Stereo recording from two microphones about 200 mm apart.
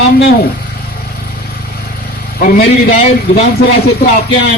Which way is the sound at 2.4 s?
40° left (ahead or behind).